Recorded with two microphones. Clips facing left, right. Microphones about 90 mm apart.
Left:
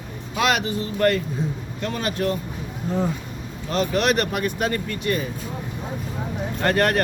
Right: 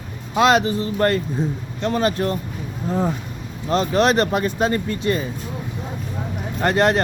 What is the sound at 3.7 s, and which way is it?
Speech, 35° right (ahead or behind).